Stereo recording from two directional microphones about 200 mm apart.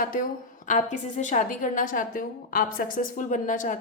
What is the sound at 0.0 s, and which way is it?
A woman's voice, 45° left (ahead or behind).